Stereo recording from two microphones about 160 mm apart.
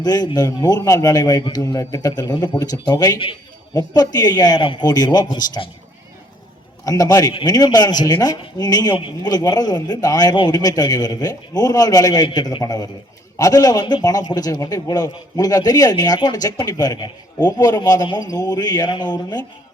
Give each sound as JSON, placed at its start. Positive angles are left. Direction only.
{"t": 0.0, "sound": "speech", "side_deg": 25}
{"t": 6.8, "sound": "speech", "side_deg": 20}